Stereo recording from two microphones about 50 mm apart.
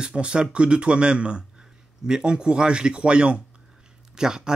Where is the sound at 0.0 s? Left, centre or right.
Centre.